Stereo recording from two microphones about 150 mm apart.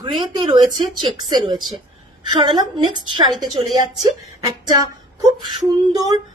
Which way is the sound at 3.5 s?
Centre (ahead or behind).